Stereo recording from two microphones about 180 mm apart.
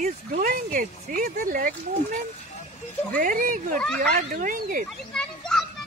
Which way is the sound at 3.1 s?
50° right (ahead or behind).